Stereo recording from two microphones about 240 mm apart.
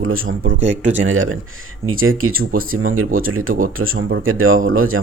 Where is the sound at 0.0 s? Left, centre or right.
Right.